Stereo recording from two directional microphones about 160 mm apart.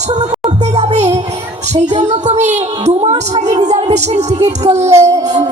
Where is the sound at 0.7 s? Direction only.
45° right (ahead or behind).